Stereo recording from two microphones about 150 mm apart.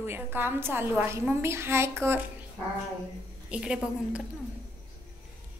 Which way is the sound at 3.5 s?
5° right (ahead or behind).